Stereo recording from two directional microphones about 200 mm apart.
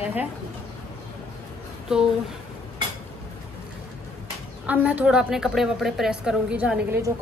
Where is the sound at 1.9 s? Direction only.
5° right (ahead or behind).